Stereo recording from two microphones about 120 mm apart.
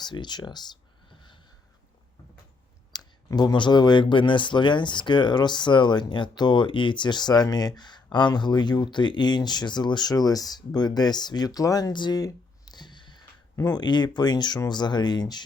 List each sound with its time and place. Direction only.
0.0 s speech: 35° left (ahead or behind)
2.9 s speech: 35° left (ahead or behind)